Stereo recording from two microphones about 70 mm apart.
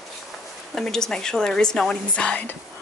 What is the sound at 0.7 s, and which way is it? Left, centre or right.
Speech, centre.